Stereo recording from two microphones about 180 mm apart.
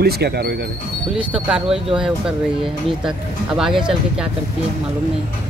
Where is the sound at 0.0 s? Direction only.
60° right (ahead or behind).